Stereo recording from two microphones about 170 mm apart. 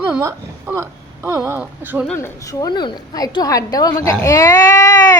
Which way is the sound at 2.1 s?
15° left (ahead or behind).